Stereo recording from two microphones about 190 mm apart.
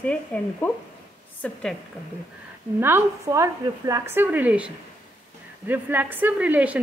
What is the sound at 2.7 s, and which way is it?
A woman's voice, 10° right (ahead or behind).